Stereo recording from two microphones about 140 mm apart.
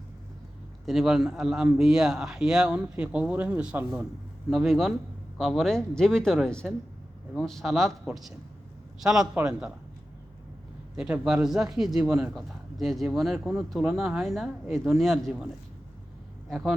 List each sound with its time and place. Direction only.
0.9 s a man's voice: 5° right (ahead or behind)
10.9 s a man's voice: 5° right (ahead or behind)
16.5 s speech: centre (ahead or behind)